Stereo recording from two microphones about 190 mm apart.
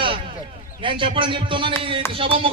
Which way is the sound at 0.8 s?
25° right (ahead or behind).